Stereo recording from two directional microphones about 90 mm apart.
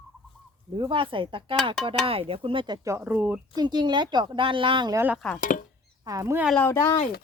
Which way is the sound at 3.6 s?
55° right (ahead or behind).